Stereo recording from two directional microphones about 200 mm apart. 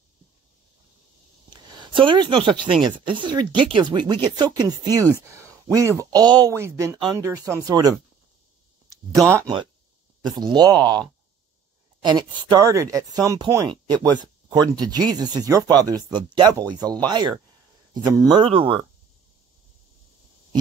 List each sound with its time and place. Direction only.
1.5 s speech: 25° right (ahead or behind)
9.3 s speech: 20° right (ahead or behind)
12.0 s speech: 20° right (ahead or behind)